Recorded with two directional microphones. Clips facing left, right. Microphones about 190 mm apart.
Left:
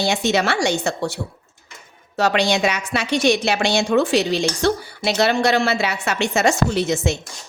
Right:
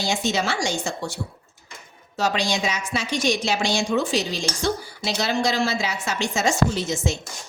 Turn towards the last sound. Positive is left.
turn(degrees=65)  # may be behind; listen again after turning